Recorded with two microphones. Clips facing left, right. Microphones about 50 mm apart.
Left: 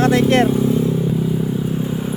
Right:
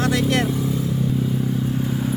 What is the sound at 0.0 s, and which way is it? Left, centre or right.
Vehicle, left.